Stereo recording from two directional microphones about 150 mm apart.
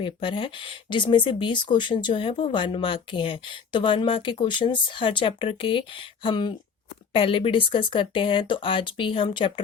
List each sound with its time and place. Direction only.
0.0 s speech: 35° left (ahead or behind)